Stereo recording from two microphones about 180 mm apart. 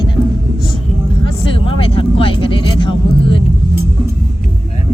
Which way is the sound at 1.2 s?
30° left (ahead or behind).